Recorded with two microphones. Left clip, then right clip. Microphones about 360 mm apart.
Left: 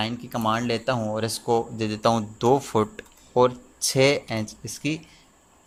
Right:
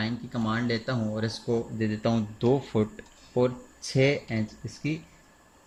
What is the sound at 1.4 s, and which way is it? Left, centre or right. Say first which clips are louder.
Speech: left 6 dB; left.